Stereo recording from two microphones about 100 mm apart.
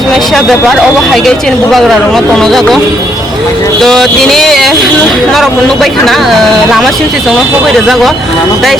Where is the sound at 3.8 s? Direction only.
5° left (ahead or behind).